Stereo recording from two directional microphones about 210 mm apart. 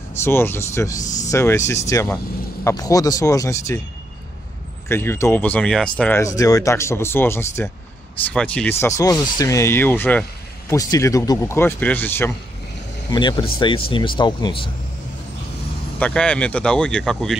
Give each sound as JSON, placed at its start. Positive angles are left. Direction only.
{"t": 0.1, "sound": "speech", "side_deg": 10}
{"t": 1.0, "sound": "speech", "side_deg": 35}
{"t": 1.3, "sound": "speech", "side_deg": 10}
{"t": 4.8, "sound": "speech", "side_deg": 10}
{"t": 13.1, "sound": "speech", "side_deg": 20}
{"t": 16.0, "sound": "speech", "side_deg": 5}